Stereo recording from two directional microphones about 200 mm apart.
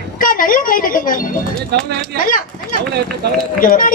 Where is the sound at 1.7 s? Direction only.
55° right (ahead or behind).